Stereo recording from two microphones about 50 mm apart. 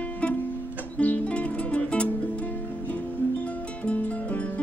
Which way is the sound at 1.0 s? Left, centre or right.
Left.